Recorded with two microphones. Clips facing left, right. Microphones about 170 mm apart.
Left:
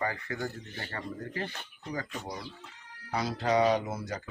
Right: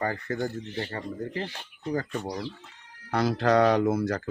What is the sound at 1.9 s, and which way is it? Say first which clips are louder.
Speech: right 7 dB; 50° right (ahead or behind).